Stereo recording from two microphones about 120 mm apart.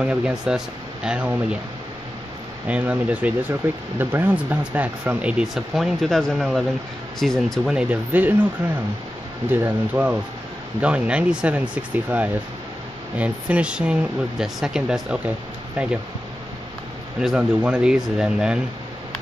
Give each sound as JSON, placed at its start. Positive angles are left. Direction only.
{"t": 0.0, "sound": "speech", "side_deg": -5}
{"t": 2.7, "sound": "speech", "side_deg": -10}
{"t": 9.5, "sound": "speech", "side_deg": -20}
{"t": 17.2, "sound": "speech", "side_deg": -5}